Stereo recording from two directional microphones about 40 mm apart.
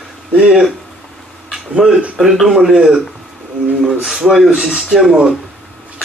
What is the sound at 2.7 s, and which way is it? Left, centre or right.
Speech, right.